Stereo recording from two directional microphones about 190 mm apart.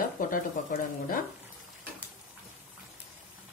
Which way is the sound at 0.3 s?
45° left (ahead or behind).